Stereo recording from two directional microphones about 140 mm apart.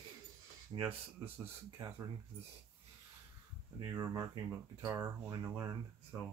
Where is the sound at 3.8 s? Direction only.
30° right (ahead or behind).